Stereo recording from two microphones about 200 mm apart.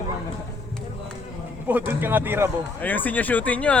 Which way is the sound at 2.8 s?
10° left (ahead or behind).